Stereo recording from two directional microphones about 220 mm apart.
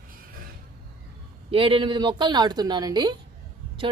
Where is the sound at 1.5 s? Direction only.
25° right (ahead or behind).